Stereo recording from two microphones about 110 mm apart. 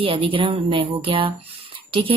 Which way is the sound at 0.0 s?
55° right (ahead or behind).